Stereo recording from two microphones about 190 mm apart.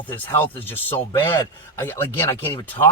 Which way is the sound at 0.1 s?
10° left (ahead or behind).